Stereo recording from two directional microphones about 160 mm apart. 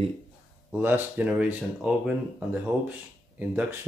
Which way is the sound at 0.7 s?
15° right (ahead or behind).